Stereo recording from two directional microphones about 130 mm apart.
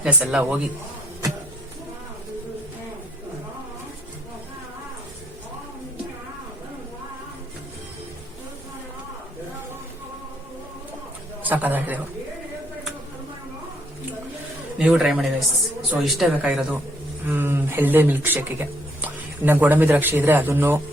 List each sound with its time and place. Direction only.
0.0 s speech: 10° right (ahead or behind)
11.4 s speech: 15° right (ahead or behind)
14.8 s speech: 5° right (ahead or behind)